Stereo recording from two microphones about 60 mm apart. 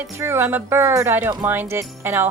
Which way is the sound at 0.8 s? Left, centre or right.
Right.